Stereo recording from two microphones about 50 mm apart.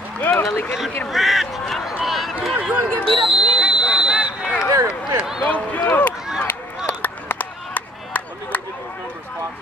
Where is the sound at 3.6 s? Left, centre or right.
Centre.